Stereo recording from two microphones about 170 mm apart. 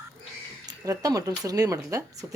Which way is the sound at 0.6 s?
20° right (ahead or behind).